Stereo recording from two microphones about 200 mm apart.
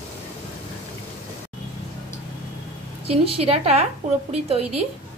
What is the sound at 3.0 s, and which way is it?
Speech, 30° right (ahead or behind).